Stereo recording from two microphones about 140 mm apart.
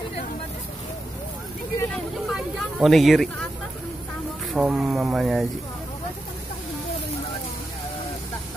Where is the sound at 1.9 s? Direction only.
Centre (ahead or behind).